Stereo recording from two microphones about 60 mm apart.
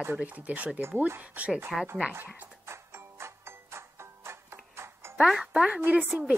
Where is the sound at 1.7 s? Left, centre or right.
Centre.